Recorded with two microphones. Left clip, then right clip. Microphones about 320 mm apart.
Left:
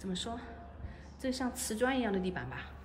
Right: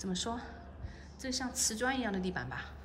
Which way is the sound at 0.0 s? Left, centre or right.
Centre.